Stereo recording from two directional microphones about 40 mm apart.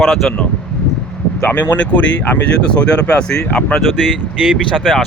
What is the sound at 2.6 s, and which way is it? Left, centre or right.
Speech, left.